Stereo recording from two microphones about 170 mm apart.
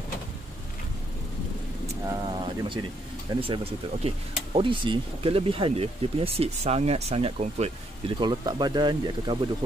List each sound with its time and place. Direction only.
2.0 s speech: 25° right (ahead or behind)